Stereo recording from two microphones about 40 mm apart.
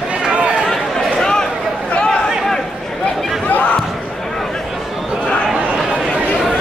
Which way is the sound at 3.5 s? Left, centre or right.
Left.